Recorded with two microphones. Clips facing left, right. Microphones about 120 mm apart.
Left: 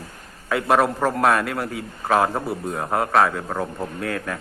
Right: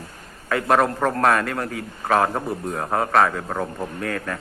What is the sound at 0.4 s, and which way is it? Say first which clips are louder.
A man's voice: even; 5° left (ahead or behind).